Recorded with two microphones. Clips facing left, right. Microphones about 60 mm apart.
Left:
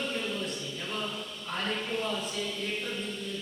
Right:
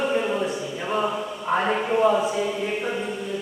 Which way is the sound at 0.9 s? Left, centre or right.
Right.